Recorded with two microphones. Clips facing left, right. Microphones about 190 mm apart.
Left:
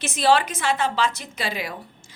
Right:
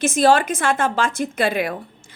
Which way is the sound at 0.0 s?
45° right (ahead or behind).